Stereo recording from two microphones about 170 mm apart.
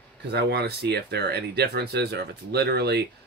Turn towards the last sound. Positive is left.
turn(degrees=-75)  # may be behind; listen again after turning